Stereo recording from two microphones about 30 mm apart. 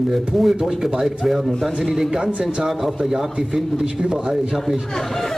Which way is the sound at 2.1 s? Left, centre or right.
Right.